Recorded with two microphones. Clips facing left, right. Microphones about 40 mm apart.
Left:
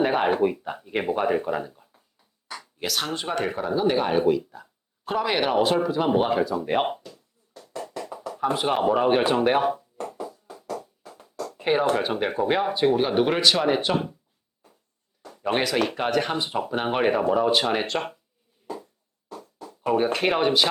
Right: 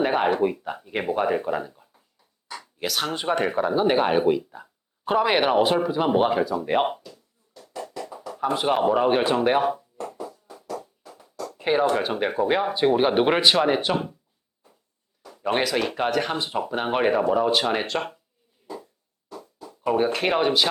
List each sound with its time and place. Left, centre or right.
0.0 s speech: centre
8.5 s speech: centre
11.6 s speech: centre
13.0 s speech: right
13.9 s speech: centre
15.4 s speech: centre
19.8 s speech: centre